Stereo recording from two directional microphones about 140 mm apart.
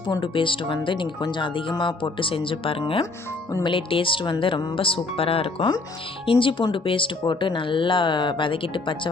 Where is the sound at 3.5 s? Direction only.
25° left (ahead or behind).